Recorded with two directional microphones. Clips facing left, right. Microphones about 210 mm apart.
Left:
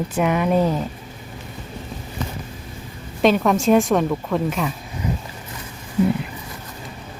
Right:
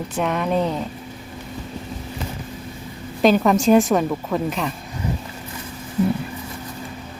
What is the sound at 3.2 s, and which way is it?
Speech, centre (ahead or behind).